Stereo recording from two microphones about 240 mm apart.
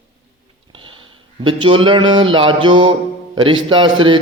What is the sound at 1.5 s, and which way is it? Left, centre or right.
Speech, right.